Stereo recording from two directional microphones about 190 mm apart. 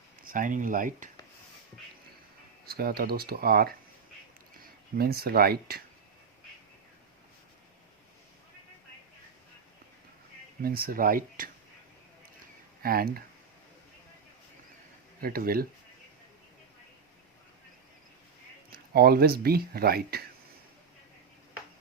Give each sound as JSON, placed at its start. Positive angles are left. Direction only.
{"t": 0.3, "sound": "speech", "side_deg": -45}
{"t": 2.6, "sound": "speech", "side_deg": -50}
{"t": 4.9, "sound": "speech", "side_deg": -55}
{"t": 10.6, "sound": "speech", "side_deg": -50}
{"t": 12.8, "sound": "speech", "side_deg": -50}
{"t": 15.2, "sound": "speech", "side_deg": -50}
{"t": 18.7, "sound": "speech", "side_deg": -55}